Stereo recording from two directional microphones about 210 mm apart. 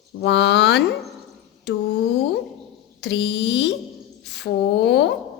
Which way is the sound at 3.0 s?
60° left (ahead or behind).